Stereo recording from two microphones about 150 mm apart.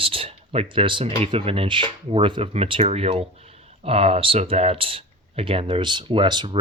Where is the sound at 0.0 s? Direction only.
35° right (ahead or behind).